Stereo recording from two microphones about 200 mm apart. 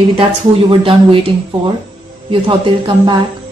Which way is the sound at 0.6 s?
25° right (ahead or behind).